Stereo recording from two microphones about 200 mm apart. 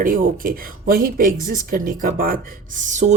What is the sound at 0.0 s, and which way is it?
Speech, 45° right (ahead or behind).